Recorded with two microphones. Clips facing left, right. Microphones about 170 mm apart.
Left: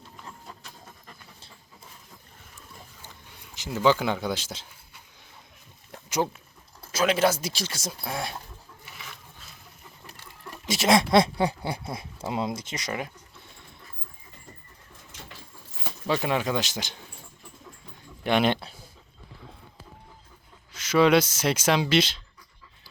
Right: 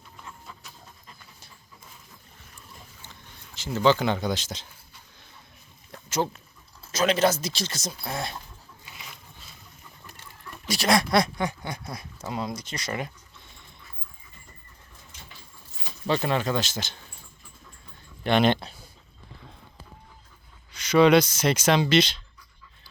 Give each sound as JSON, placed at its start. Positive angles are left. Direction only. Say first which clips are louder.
{"t": 3.5, "sound": "speech", "louder": "right 1 dB", "side_deg": 15}
{"t": 6.1, "sound": "speech", "louder": "even", "side_deg": 10}
{"t": 8.8, "sound": "a sound", "louder": "left 1 dB", "side_deg": -15}
{"t": 10.7, "sound": "speech", "louder": "left 2 dB", "side_deg": 20}
{"t": 16.0, "sound": "speech", "louder": "right 1 dB", "side_deg": 10}
{"t": 18.2, "sound": "a man's voice", "louder": "right 2 dB", "side_deg": 10}
{"t": 20.7, "sound": "speech", "louder": "right 2 dB", "side_deg": 5}